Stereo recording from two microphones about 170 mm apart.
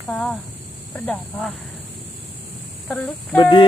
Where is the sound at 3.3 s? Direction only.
25° left (ahead or behind).